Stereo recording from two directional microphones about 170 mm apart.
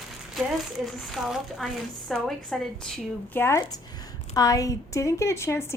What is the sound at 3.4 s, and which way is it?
A woman's voice, 15° left (ahead or behind).